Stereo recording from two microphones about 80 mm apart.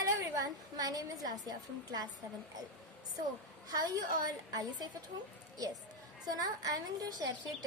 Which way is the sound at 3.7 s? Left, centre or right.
Right.